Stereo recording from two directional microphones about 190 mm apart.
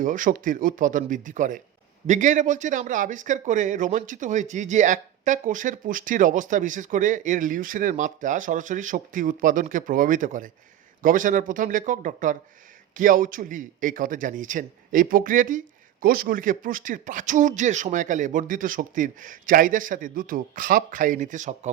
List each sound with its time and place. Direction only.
0.0 s a man's voice: 45° right (ahead or behind)